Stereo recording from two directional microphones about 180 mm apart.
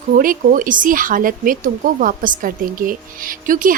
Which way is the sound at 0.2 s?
50° right (ahead or behind).